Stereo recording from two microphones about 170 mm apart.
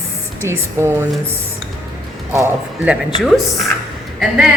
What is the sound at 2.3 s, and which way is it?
Speech, 15° right (ahead or behind).